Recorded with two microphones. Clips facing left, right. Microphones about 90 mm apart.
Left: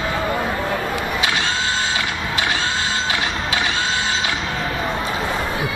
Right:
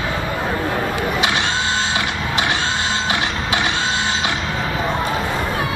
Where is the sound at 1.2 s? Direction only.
20° right (ahead or behind).